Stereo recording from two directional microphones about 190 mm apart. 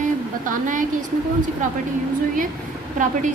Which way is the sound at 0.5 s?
45° right (ahead or behind).